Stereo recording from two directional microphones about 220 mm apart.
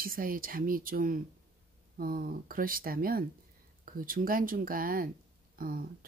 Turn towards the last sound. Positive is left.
turn(degrees=-40)  # may be behind; listen again after turning